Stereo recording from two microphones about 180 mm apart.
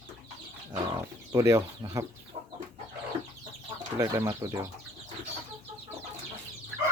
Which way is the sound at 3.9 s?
15° right (ahead or behind).